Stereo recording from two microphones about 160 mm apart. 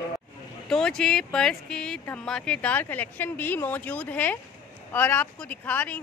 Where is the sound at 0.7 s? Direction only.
5° left (ahead or behind).